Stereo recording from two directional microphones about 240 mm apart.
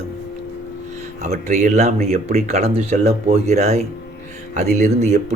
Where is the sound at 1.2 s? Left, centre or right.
Right.